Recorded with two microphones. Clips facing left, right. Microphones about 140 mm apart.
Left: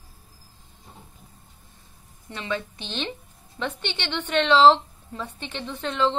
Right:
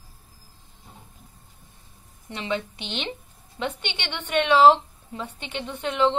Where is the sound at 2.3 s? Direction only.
20° right (ahead or behind).